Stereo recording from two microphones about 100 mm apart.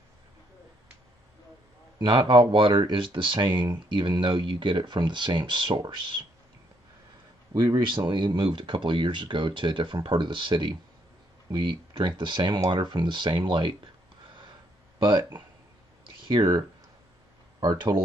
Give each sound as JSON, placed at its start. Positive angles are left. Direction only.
{"t": 2.0, "sound": "speech", "side_deg": -55}
{"t": 7.5, "sound": "speech", "side_deg": -45}
{"t": 15.0, "sound": "speech", "side_deg": -50}
{"t": 16.3, "sound": "speech", "side_deg": -50}